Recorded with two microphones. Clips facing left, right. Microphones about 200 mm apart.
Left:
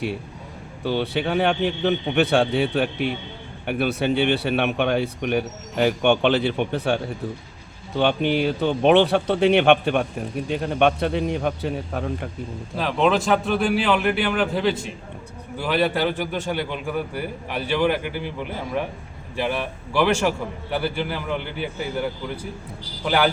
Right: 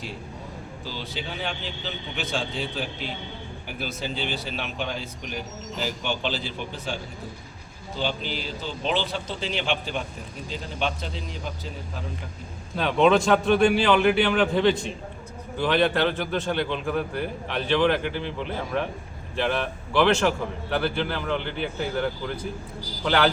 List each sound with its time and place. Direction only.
0.9 s a man's voice: 65° left (ahead or behind)
12.7 s a man's voice: centre (ahead or behind)